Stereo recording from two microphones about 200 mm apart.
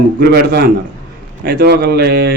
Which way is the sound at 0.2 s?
55° right (ahead or behind).